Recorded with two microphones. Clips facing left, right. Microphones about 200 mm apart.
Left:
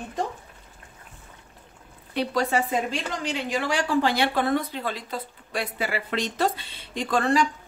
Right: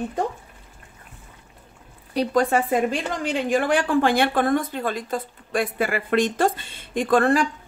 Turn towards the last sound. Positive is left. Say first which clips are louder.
# right 4 dB
turn(degrees=-55)  # may be behind; listen again after turning